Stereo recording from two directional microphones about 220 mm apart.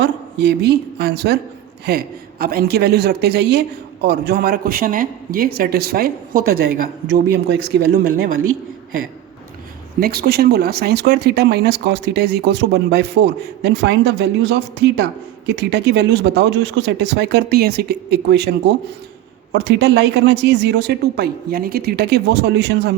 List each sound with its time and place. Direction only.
0.0 s a woman's voice: 50° right (ahead or behind)
7.4 s speech: 45° right (ahead or behind)
10.0 s speech: 45° right (ahead or behind)
19.5 s speech: 50° right (ahead or behind)